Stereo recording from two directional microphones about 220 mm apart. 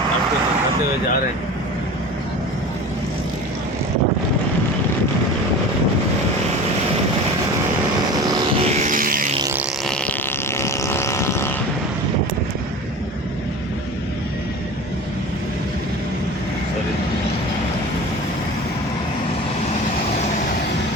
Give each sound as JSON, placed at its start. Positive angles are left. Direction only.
{"t": 8.6, "sound": "vehicle", "side_deg": -30}
{"t": 9.8, "sound": "vehicle", "side_deg": 5}